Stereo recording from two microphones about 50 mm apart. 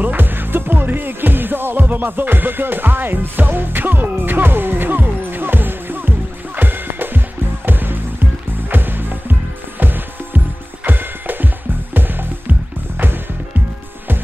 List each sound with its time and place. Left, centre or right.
0.0 s music: right